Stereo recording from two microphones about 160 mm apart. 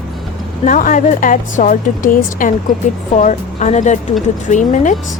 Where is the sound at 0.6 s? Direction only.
55° left (ahead or behind).